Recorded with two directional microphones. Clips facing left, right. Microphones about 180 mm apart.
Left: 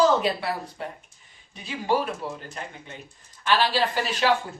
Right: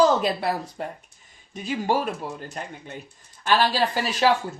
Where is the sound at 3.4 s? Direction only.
45° right (ahead or behind).